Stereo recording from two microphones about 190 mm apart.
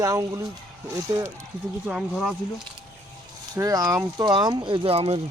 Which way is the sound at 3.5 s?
20° right (ahead or behind).